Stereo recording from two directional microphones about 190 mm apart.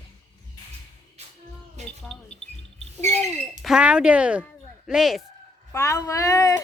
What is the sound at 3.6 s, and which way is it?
Speech, 5° right (ahead or behind).